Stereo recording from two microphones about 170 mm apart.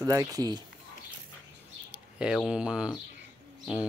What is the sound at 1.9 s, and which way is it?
Speech, 5° right (ahead or behind).